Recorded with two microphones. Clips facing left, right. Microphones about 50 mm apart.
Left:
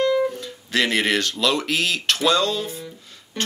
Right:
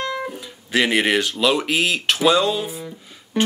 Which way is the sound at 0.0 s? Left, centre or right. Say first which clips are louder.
Left 6 dB; centre.